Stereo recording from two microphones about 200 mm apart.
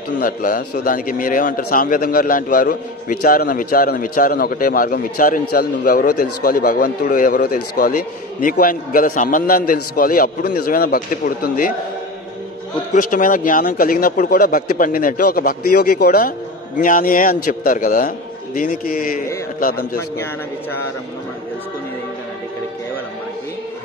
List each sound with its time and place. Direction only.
0.2 s a man's voice: 45° left (ahead or behind)
12.9 s a man's voice: 40° left (ahead or behind)